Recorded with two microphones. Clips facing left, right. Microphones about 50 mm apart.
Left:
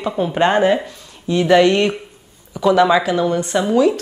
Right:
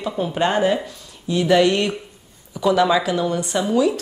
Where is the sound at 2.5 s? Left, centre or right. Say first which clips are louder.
Left 4 dB; centre; by 4.0 s left.